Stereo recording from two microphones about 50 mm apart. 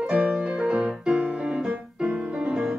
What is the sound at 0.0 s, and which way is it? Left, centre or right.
Music, centre.